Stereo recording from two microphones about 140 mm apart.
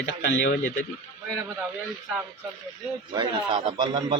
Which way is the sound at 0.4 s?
85° left.